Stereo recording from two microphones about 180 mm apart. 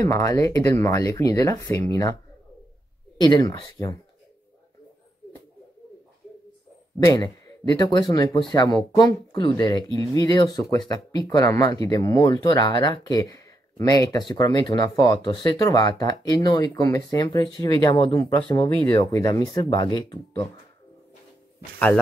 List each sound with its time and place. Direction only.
0.0 s speech: 20° left (ahead or behind)
3.2 s speech: 25° left (ahead or behind)
7.1 s speech: 20° left (ahead or behind)